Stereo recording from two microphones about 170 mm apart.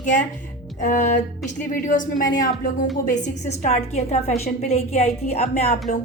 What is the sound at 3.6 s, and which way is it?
A woman's voice, 40° left (ahead or behind).